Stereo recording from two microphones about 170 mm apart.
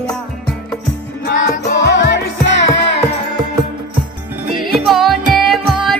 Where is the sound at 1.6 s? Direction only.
90° left.